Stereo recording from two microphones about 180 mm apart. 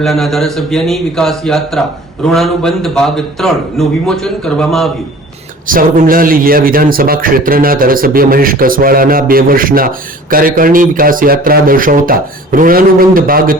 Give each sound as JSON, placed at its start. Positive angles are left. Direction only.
{"t": 0.0, "sound": "a man's voice", "side_deg": 0}
{"t": 5.6, "sound": "a man's voice", "side_deg": -50}